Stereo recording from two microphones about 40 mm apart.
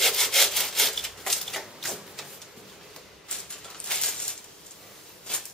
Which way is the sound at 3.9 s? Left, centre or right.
Centre.